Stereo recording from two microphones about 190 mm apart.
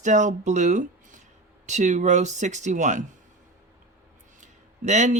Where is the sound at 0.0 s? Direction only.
40° right (ahead or behind).